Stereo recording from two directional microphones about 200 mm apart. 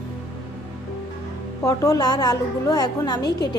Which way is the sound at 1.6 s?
15° left (ahead or behind).